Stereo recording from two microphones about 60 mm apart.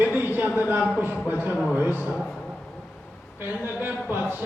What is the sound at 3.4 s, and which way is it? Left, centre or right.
Speech, right.